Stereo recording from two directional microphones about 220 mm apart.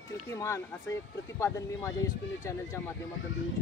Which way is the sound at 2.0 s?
15° left (ahead or behind).